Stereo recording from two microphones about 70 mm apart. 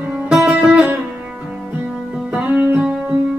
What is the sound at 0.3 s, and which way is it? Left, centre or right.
Music, centre.